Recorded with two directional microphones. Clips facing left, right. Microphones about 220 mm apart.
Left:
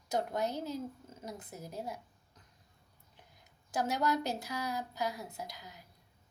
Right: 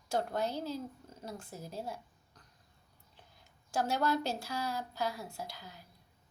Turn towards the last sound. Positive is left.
turn(degrees=20)  # may be behind; listen again after turning